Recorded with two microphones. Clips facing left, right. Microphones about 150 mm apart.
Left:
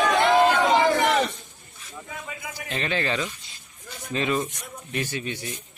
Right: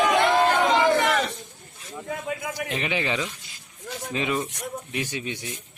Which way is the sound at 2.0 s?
55° right (ahead or behind).